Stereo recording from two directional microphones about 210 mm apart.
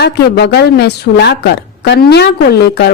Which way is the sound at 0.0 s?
50° left (ahead or behind).